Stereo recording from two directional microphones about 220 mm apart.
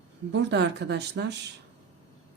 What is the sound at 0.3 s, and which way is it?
Speech, 50° right (ahead or behind).